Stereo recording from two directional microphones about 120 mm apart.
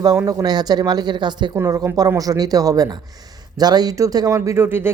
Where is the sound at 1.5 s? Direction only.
30° right (ahead or behind).